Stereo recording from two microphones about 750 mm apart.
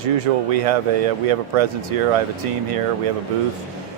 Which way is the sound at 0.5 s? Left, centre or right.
Right.